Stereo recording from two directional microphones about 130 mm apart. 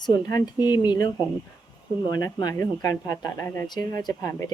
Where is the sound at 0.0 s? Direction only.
30° left (ahead or behind).